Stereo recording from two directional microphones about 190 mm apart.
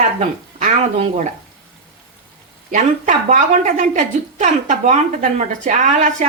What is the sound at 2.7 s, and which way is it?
A woman's voice, 40° right (ahead or behind).